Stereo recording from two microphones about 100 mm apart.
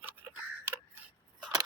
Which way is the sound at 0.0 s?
20° right (ahead or behind).